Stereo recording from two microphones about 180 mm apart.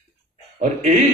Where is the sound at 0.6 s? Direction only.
40° right (ahead or behind).